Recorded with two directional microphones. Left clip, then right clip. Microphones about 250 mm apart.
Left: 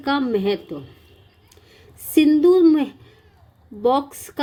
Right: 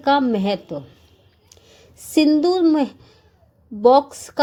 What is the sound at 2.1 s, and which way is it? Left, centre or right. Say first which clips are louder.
A woman's voice: left 2 dB; centre.